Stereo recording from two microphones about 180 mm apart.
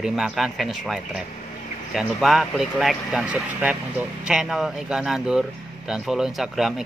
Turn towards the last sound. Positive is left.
turn(degrees=0)  # may be behind; listen again after turning